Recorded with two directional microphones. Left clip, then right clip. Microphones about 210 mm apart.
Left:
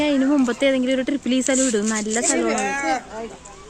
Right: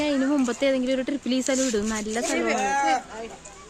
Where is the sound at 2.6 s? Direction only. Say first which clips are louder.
Even; 35° right (ahead or behind).